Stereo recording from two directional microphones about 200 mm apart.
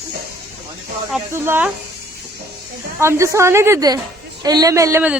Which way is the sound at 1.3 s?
10° right (ahead or behind).